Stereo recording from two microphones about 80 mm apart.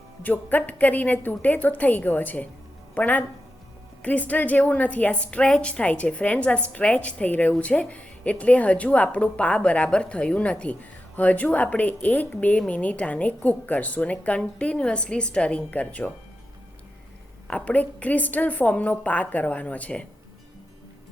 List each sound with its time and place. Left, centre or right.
0.2 s a woman's voice: left
17.5 s a woman's voice: centre